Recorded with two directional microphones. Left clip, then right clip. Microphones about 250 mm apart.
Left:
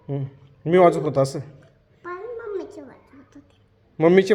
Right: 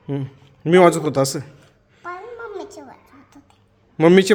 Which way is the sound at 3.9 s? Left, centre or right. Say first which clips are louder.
Right 3 dB; right.